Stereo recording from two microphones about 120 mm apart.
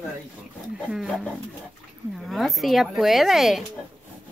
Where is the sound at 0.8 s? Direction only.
5° left (ahead or behind).